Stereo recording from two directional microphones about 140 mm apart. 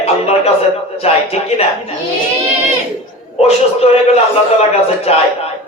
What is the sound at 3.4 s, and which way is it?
A man's voice, 45° left (ahead or behind).